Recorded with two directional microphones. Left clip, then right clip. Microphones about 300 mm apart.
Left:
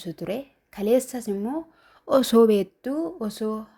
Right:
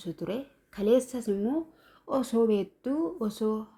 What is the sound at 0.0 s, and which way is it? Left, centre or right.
Speech, left.